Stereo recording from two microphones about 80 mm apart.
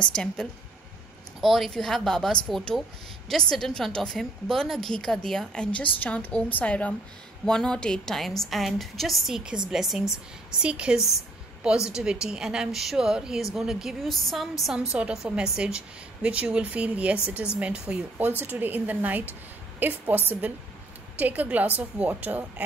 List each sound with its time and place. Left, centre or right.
0.0 s a woman's voice: centre
1.4 s a woman's voice: centre
18.4 s a woman's voice: right